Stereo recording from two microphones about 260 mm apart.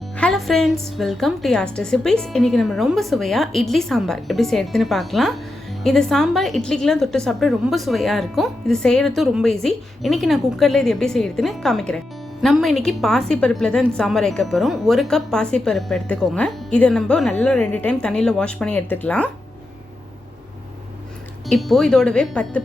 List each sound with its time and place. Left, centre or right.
0.2 s a woman's voice: centre
21.4 s a woman's voice: centre